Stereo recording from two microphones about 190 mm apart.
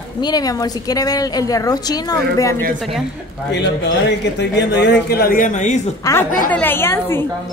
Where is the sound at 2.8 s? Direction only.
Centre (ahead or behind).